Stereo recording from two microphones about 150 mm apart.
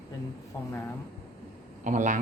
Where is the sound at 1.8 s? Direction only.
60° right (ahead or behind).